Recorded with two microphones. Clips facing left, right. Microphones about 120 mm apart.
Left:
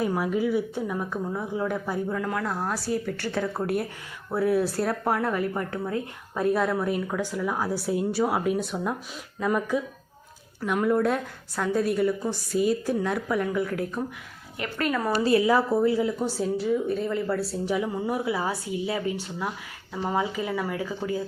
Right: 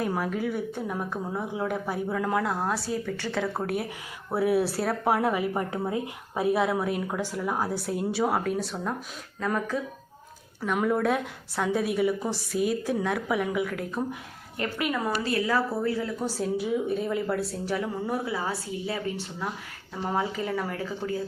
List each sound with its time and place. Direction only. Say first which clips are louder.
0.0 s a woman's voice: left 3 dB; centre (ahead or behind)
1.1 s a woman's voice: left 2 dB; 15° right (ahead or behind)
6.4 s a woman's voice: left 1 dB; 5° right (ahead or behind)
15.1 s a woman's voice: left 7 dB; 30° left (ahead or behind)
15.4 s speech: left 5 dB; 20° left (ahead or behind)
16.4 s a woman's voice: left 1 dB; 5° right (ahead or behind)
18.3 s speech: left 3 dB; 25° left (ahead or behind)
20.0 s speech: left 2 dB; centre (ahead or behind)